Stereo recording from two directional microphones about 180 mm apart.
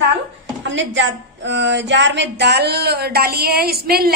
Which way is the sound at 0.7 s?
90° right.